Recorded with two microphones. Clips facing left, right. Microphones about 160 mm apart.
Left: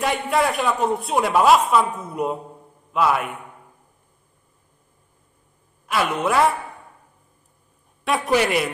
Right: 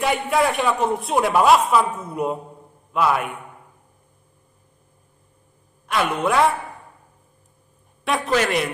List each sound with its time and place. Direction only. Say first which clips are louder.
0.0 s a man's voice: right 1 dB; centre (ahead or behind)
5.9 s a man's voice: right 1 dB; centre (ahead or behind)
8.3 s a man's voice: left 1 dB; 10° left (ahead or behind)